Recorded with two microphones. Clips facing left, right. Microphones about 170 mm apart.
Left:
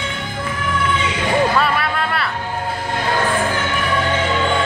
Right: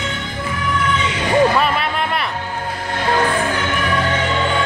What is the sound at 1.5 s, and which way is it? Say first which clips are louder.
Music: even; 20° right (ahead or behind).